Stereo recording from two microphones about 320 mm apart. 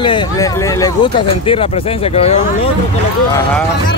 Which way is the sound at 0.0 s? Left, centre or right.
Centre.